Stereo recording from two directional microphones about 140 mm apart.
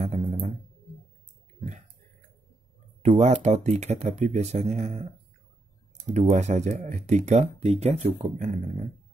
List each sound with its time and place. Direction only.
0.0 s music: 50° right (ahead or behind)
1.5 s clicking: 55° right (ahead or behind)
3.0 s speech: 55° right (ahead or behind)
6.0 s speech: 55° right (ahead or behind)
8.4 s speech: 60° right (ahead or behind)